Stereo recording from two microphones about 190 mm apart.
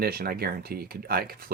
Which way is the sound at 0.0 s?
55° right (ahead or behind).